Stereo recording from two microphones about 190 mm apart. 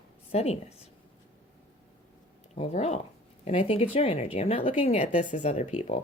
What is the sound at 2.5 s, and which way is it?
Speech, 35° left (ahead or behind).